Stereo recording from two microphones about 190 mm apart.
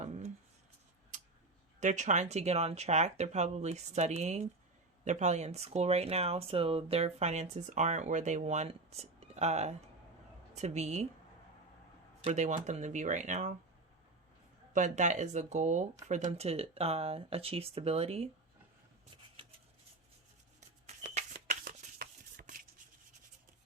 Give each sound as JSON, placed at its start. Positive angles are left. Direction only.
{"t": 0.0, "sound": "a sound", "side_deg": -35}
{"t": 1.8, "sound": "speech", "side_deg": -40}
{"t": 12.2, "sound": "speech", "side_deg": -35}
{"t": 14.7, "sound": "speech", "side_deg": -40}
{"t": 20.6, "sound": "a sound", "side_deg": -35}
{"t": 21.5, "sound": "shuffling cards", "side_deg": -45}